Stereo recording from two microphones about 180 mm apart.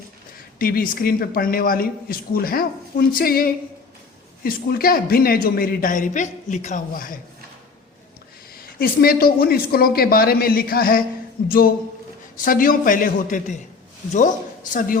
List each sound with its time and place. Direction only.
0.6 s a woman's voice: 55° left (ahead or behind)
8.5 s a woman's voice: 55° left (ahead or behind)